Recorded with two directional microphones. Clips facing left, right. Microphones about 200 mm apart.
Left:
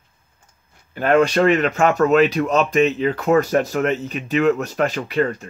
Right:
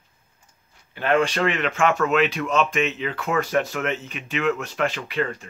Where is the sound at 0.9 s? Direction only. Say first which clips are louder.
Left 5 dB; 40° left (ahead or behind).